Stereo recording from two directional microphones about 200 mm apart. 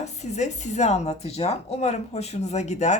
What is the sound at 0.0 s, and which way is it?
Speech, 35° left (ahead or behind).